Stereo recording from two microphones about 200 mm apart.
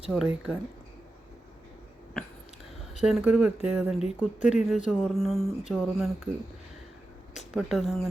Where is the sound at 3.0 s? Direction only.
5° right (ahead or behind).